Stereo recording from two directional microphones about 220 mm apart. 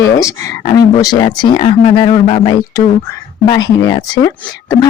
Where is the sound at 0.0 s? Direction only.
15° left (ahead or behind).